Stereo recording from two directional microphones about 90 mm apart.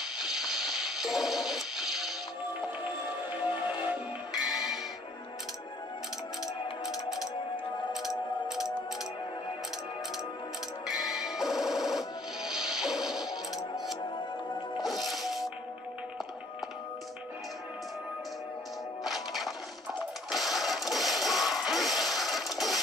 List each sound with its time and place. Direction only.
0.0 s a sound: 5° right (ahead or behind)
2.8 s music: 20° right (ahead or behind)
4.3 s music: 5° right (ahead or behind)
6.4 s music: 5° right (ahead or behind)
8.5 s music: 5° right (ahead or behind)
10.9 s music: 5° right (ahead or behind)
13.3 s music: 45° left (ahead or behind)
14.0 s music: 60° left (ahead or behind)
14.8 s music: centre (ahead or behind)
19.0 s music: centre (ahead or behind)